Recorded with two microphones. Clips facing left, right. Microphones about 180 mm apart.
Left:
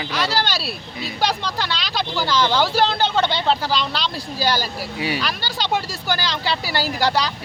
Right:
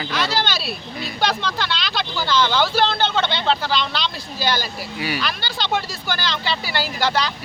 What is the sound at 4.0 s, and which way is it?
Speech, 35° left (ahead or behind).